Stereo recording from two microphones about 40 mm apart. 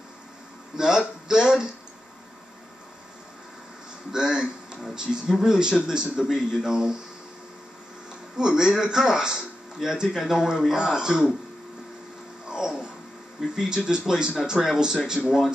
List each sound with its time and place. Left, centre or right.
0.7 s speech: centre
4.1 s speech: centre
8.4 s speech: centre
12.4 s a sound: centre
13.4 s speech: centre